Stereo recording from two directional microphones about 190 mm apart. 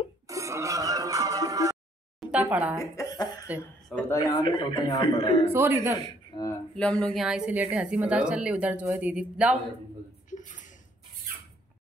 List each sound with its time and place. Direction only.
0.3 s music: 15° right (ahead or behind)
2.1 s a sound: 5° right (ahead or behind)
2.8 s a man's voice: 20° left (ahead or behind)
5.5 s speech: 15° right (ahead or behind)
6.3 s speech: 25° left (ahead or behind)
6.7 s a woman's voice: 5° left (ahead or behind)
10.3 s a sound: 40° left (ahead or behind)